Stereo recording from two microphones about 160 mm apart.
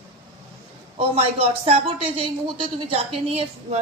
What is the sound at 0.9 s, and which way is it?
A woman's voice, 35° right (ahead or behind).